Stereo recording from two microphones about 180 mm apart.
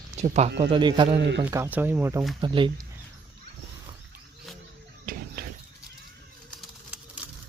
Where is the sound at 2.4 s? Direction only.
25° right (ahead or behind).